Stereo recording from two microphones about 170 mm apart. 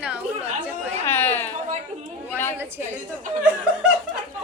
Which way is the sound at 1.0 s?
10° left (ahead or behind).